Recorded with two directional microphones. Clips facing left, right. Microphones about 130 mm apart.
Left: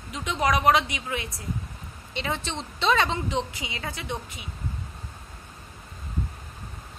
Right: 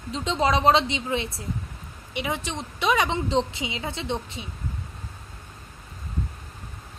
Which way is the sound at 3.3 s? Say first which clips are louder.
Right 5 dB; 30° right (ahead or behind).